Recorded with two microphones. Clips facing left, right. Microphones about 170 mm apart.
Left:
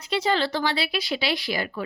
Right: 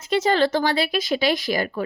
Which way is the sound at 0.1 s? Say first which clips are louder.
Right 5 dB; 45° right (ahead or behind).